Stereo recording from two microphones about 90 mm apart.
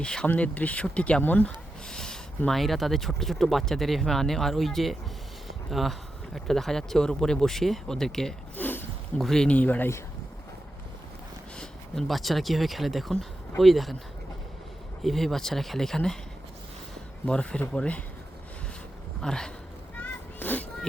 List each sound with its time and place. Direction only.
0.0 s speech: 10° left (ahead or behind)
8.5 s a sound: 20° left (ahead or behind)
9.1 s speech: 5° left (ahead or behind)
9.6 s speech: 20° left (ahead or behind)
11.5 s speech: 5° left (ahead or behind)
15.0 s speech: 5° left (ahead or behind)
17.2 s speech: 10° left (ahead or behind)
19.2 s speech: 5° left (ahead or behind)
20.0 s a sound: 20° left (ahead or behind)